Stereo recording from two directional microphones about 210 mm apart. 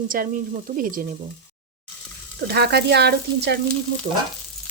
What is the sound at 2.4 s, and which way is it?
Speech, 50° right (ahead or behind).